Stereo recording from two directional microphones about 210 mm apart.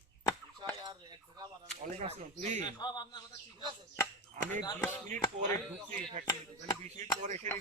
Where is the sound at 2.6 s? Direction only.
20° left (ahead or behind).